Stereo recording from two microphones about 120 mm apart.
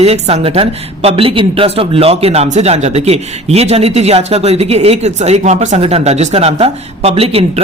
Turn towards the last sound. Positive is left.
turn(degrees=-55)  # may be behind; listen again after turning